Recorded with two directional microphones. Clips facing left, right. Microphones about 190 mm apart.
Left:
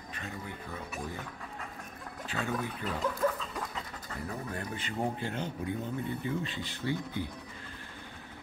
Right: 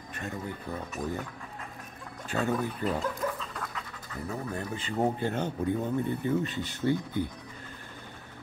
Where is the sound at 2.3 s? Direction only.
45° right (ahead or behind).